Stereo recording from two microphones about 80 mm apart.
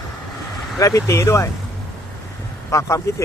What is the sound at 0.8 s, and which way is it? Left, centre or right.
Speech, left.